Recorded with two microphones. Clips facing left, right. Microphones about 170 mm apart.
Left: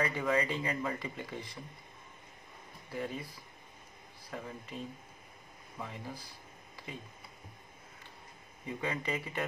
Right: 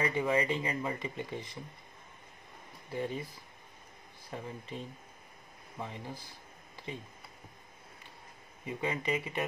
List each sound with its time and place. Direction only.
0.0 s speech: 20° right (ahead or behind)
2.9 s speech: 25° right (ahead or behind)
4.3 s speech: 25° right (ahead or behind)
5.8 s speech: 20° right (ahead or behind)
8.6 s speech: 20° right (ahead or behind)